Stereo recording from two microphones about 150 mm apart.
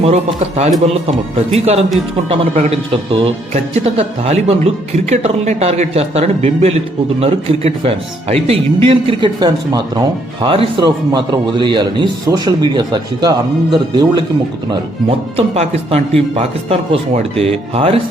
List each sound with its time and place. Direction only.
0.0 s speech: 45° right (ahead or behind); by 14.3 s 25° right (ahead or behind)
15.4 s speech: 45° right (ahead or behind)